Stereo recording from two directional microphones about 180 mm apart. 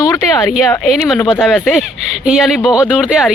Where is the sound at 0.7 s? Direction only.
5° left (ahead or behind).